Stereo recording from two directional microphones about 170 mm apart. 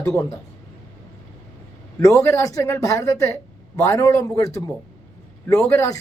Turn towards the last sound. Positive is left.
turn(degrees=20)  # may be behind; listen again after turning